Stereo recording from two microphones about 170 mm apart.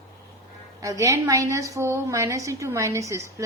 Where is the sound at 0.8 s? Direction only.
20° right (ahead or behind).